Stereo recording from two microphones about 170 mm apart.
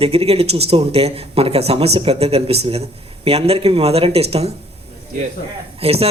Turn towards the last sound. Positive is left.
turn(degrees=-35)  # may be behind; listen again after turning